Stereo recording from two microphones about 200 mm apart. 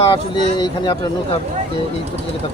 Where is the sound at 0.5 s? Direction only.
20° left (ahead or behind).